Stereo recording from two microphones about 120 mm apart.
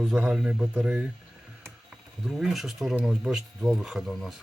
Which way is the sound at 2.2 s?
5° right (ahead or behind).